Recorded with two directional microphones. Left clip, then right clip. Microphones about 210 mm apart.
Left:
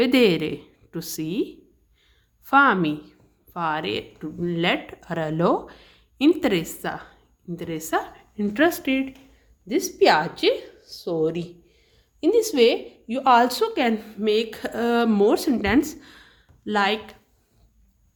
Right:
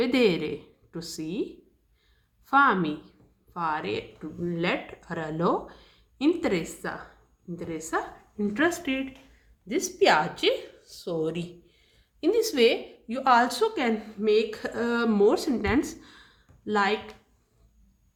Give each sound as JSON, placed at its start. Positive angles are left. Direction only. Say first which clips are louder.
{"t": 0.0, "sound": "a woman's voice", "louder": "left 5 dB", "side_deg": 45}